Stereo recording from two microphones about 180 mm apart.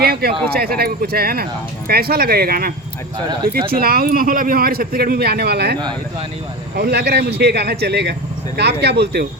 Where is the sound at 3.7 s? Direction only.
55° right (ahead or behind).